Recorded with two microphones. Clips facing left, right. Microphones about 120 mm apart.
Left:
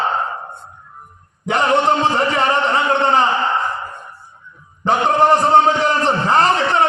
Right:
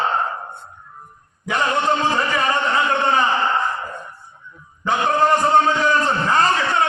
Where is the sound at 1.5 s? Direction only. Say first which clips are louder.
Left 4 dB; 30° left (ahead or behind).